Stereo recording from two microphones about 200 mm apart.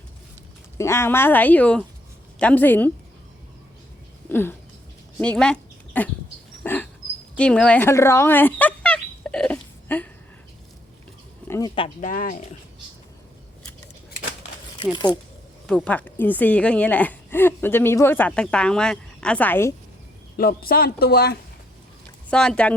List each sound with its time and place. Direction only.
0.8 s a woman's voice: 15° left (ahead or behind)
4.3 s a woman's voice: 10° left (ahead or behind)
6.6 s a sound: 10° left (ahead or behind)
11.4 s a sound: 15° left (ahead or behind)
12.0 s speech: 40° left (ahead or behind)
14.9 s speech: 20° left (ahead or behind)
15.6 s a woman's voice: 5° left (ahead or behind)
20.3 s a man's voice: 50° left (ahead or behind)
22.3 s speech: 5° left (ahead or behind)